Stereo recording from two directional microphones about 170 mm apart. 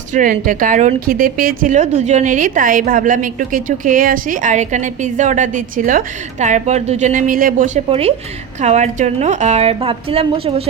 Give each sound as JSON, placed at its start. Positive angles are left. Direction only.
{"t": 0.1, "sound": "a woman's voice", "side_deg": -50}
{"t": 7.9, "sound": "a woman's voice", "side_deg": -35}